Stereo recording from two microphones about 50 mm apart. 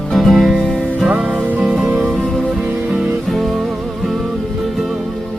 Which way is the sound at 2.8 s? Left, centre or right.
Centre.